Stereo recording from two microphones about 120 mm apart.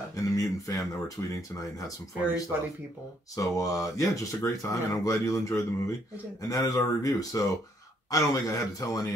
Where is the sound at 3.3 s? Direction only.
30° left (ahead or behind).